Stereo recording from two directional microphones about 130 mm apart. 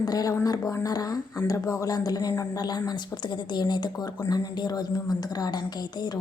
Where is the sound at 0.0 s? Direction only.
30° left (ahead or behind).